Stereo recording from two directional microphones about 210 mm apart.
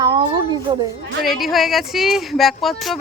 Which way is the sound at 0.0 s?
20° right (ahead or behind).